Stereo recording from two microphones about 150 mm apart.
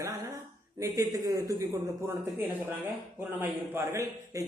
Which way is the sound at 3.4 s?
15° right (ahead or behind).